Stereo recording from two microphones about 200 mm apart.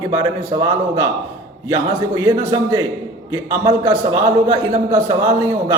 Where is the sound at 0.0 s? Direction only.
20° right (ahead or behind).